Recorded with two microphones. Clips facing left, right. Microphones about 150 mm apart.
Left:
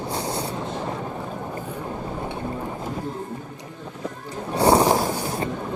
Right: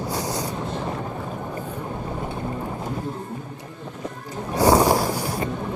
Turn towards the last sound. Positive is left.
turn(degrees=25)  # may be behind; listen again after turning